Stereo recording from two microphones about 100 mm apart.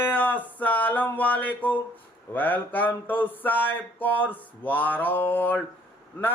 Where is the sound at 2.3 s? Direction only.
20° left (ahead or behind).